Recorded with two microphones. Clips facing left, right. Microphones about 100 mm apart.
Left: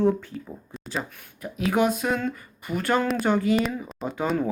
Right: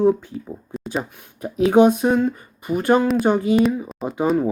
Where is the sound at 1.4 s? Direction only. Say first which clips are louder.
Right 9 dB; 25° right (ahead or behind).